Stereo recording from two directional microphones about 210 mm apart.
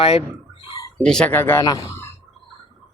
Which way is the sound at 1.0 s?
5° left (ahead or behind).